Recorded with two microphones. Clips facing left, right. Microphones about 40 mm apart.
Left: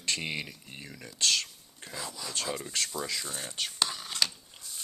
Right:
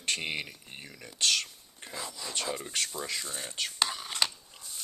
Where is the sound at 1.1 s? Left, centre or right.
Right.